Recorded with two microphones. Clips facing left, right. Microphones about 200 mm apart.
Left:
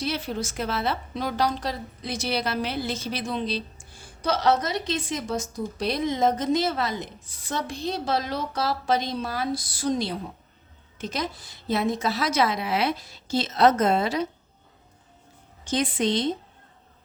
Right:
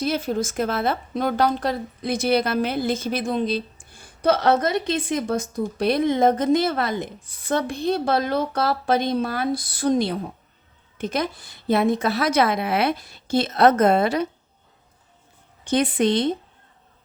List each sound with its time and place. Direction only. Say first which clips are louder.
0.0 s a woman's voice: right 6 dB; 50° right (ahead or behind)
15.6 s a woman's voice: right 5 dB; 60° right (ahead or behind)